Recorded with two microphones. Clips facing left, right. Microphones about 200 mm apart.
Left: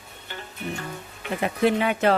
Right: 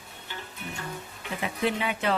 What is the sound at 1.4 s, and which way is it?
Speech, 50° left (ahead or behind).